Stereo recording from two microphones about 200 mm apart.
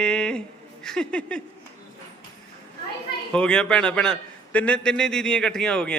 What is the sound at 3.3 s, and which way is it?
Speech, 5° left (ahead or behind).